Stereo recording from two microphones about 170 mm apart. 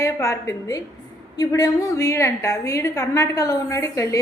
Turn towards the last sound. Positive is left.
turn(degrees=20)  # may be behind; listen again after turning